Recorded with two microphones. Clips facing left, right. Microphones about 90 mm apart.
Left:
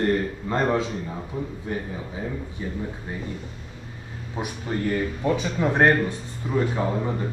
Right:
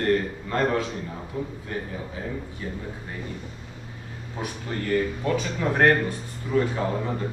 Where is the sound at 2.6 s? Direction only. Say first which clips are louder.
Left 4 dB; 20° left (ahead or behind).